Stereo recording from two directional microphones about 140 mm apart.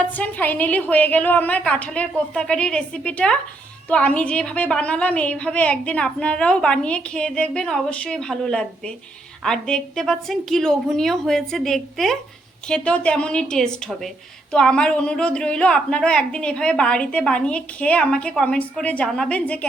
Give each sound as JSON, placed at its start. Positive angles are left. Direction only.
{"t": 0.2, "sound": "a woman's voice", "side_deg": 10}